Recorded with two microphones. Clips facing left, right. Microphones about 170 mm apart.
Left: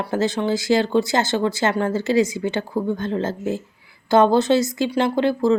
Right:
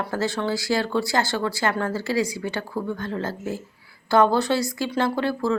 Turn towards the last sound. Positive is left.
turn(degrees=20)  # may be behind; listen again after turning